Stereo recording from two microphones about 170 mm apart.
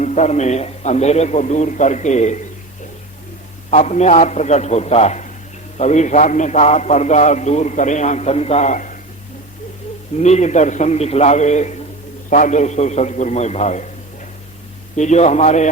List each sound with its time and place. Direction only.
0.0 s a man's voice: 45° left (ahead or behind)
3.7 s a man's voice: 45° left (ahead or behind)
10.2 s a man's voice: 40° left (ahead or behind)
14.9 s a man's voice: 45° left (ahead or behind)